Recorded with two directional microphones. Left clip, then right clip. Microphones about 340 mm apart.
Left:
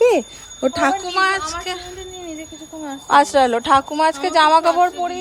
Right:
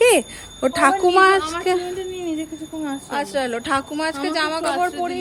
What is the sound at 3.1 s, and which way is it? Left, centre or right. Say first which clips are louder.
Speech: left 11 dB; centre.